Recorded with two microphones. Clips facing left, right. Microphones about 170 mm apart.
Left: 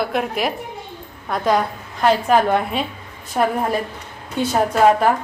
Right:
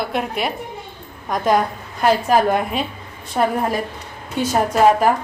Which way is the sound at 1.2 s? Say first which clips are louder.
Right 1 dB; 15° right (ahead or behind).